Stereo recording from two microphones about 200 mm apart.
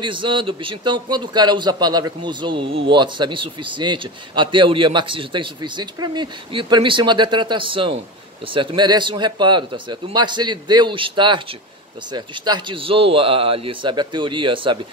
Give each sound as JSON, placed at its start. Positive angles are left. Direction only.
{"t": 0.0, "sound": "a man's voice", "side_deg": -25}